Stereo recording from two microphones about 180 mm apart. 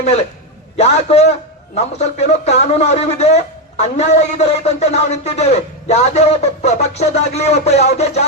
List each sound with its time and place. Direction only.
0.8 s a man's voice: 35° left (ahead or behind)